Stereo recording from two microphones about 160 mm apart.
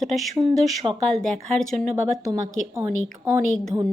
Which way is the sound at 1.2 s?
5° left (ahead or behind).